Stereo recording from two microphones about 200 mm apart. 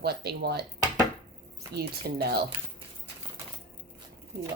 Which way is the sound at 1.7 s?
50° right (ahead or behind).